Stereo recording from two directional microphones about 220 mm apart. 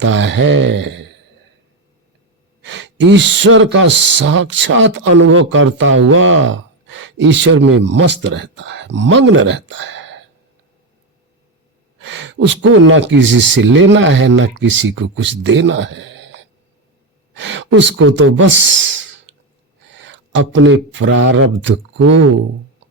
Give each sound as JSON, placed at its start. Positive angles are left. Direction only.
{"t": 0.0, "sound": "speech", "side_deg": -55}
{"t": 2.7, "sound": "speech", "side_deg": -55}
{"t": 11.9, "sound": "speech", "side_deg": -55}
{"t": 19.9, "sound": "speech", "side_deg": -55}